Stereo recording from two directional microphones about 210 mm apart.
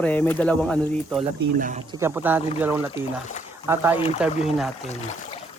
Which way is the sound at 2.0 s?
10° right (ahead or behind).